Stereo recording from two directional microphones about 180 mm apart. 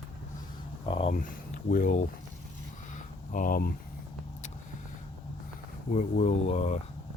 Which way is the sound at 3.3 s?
50° left (ahead or behind).